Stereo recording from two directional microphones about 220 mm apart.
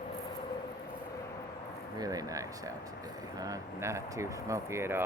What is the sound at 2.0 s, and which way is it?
Speech, 15° right (ahead or behind).